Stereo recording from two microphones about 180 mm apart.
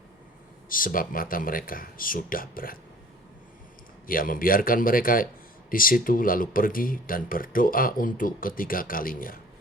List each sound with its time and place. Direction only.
0.7 s speech: 50° left (ahead or behind)
4.0 s speech: 50° left (ahead or behind)